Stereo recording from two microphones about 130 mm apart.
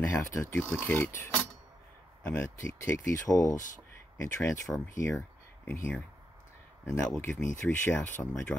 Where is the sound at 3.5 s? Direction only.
80° left.